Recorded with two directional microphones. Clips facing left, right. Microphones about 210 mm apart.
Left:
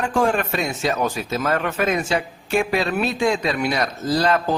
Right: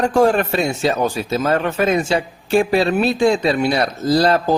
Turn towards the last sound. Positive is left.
turn(degrees=-35)  # may be behind; listen again after turning